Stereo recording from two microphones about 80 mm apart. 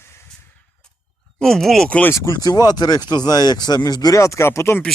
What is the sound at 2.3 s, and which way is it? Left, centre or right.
Speech, left.